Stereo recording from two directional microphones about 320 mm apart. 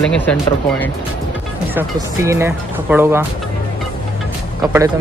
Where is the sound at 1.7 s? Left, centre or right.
Centre.